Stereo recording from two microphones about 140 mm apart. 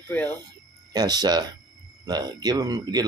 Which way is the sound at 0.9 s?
30° right (ahead or behind).